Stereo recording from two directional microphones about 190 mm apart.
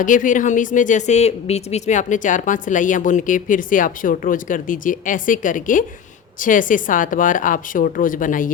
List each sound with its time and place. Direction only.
0.0 s speech: 45° left (ahead or behind)